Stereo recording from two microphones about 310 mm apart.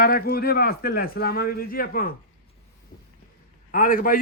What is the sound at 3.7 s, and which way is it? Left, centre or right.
Speech, left.